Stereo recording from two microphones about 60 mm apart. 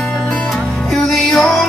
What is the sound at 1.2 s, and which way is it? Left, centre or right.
Music, centre.